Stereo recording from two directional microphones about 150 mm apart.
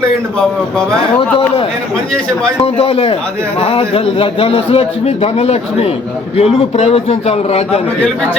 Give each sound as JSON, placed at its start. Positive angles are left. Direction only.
{"t": 2.6, "sound": "a man's voice", "side_deg": 40}